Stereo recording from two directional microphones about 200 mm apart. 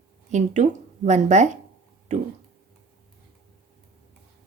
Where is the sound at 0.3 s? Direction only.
35° right (ahead or behind).